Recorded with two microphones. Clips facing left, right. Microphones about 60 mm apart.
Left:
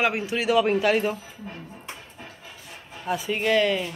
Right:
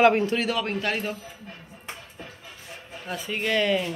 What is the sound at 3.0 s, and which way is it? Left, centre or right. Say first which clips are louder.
Speech: left 4 dB; centre.